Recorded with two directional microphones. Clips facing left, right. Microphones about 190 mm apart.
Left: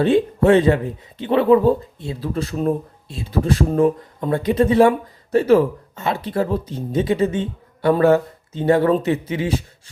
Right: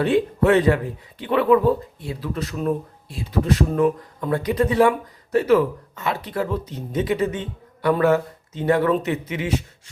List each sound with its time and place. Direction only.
0.0 s speech: 25° left (ahead or behind)